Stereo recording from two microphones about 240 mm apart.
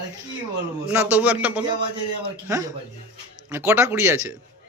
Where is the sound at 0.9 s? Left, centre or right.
Centre.